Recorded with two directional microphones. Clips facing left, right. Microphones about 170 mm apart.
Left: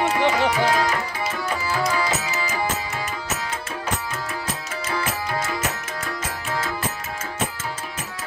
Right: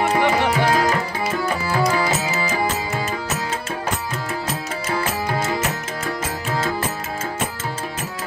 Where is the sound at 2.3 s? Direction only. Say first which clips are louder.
Right 4 dB; 30° right (ahead or behind).